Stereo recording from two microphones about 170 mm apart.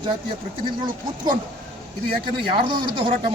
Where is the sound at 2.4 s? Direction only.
30° right (ahead or behind).